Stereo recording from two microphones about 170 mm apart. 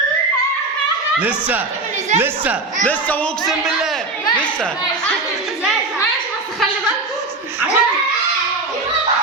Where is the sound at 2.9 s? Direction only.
10° left (ahead or behind).